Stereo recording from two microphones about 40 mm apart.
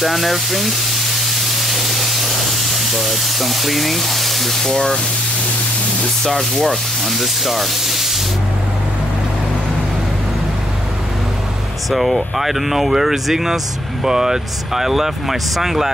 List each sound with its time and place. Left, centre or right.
0.0 s speech: centre
1.6 s spray: centre
4.7 s speech: centre
6.3 s sanding: centre
11.9 s speech: centre